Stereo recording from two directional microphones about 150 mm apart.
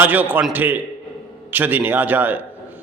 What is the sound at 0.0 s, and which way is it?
A man's voice, 10° right (ahead or behind).